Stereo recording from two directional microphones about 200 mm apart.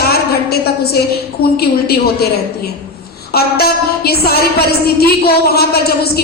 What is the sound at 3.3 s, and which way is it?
A woman's voice, 50° left (ahead or behind).